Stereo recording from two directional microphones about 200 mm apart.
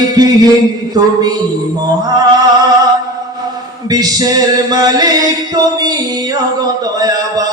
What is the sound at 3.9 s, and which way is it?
Chant, 20° right (ahead or behind).